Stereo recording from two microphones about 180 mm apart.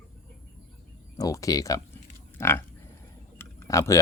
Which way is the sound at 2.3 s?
15° left (ahead or behind).